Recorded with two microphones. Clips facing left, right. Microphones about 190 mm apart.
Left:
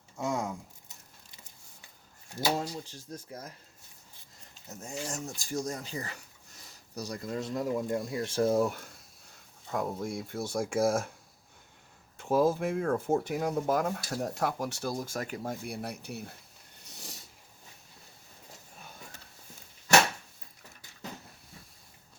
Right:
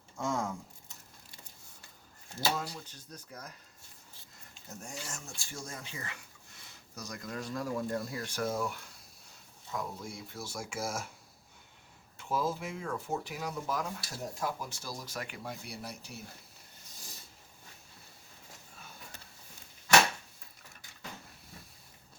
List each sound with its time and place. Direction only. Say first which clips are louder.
0.2 s speech: left 2 dB; 20° left (ahead or behind)
2.7 s speech: left 6 dB; 25° left (ahead or behind)
4.7 s speech: left 3 dB; 20° left (ahead or behind)
5.0 s speech: left 9 dB; 35° left (ahead or behind)
9.6 s speech: left 7 dB; 55° left (ahead or behind)
12.1 s speech: left 8 dB; 50° left (ahead or behind)
16.8 s a sound: left 8 dB; 70° left (ahead or behind)